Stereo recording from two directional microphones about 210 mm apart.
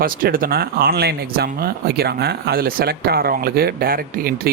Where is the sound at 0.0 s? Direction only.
40° right (ahead or behind).